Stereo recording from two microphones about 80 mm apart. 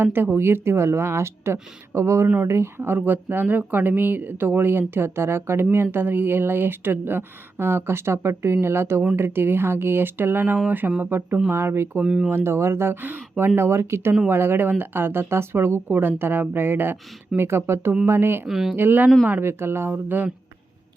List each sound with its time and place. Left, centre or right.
0.0 s speech: right
2.2 s speech: centre
2.5 s speech: right
12.0 s speech: centre
12.3 s speech: right
18.4 s speech: centre
18.8 s speech: right